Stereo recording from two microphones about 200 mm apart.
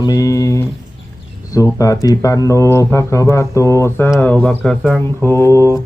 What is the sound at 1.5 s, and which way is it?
Speech, 15° left (ahead or behind).